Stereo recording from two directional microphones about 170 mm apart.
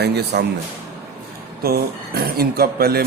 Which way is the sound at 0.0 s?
75° right (ahead or behind).